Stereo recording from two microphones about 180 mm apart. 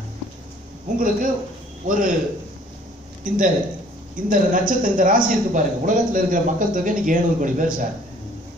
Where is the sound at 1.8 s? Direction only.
50° right (ahead or behind).